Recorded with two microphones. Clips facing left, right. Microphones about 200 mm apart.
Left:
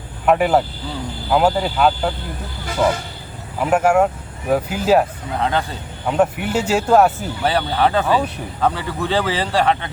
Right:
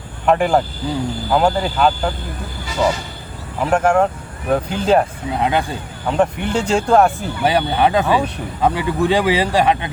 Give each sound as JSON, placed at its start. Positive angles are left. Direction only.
{"t": 0.3, "sound": "speech", "side_deg": 5}
{"t": 2.6, "sound": "speech", "side_deg": 55}
{"t": 3.6, "sound": "speech", "side_deg": 5}
{"t": 5.4, "sound": "speech", "side_deg": -15}
{"t": 6.1, "sound": "speech", "side_deg": 5}
{"t": 7.4, "sound": "speech", "side_deg": -15}